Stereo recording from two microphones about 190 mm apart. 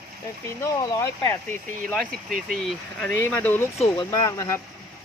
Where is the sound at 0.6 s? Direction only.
20° left (ahead or behind).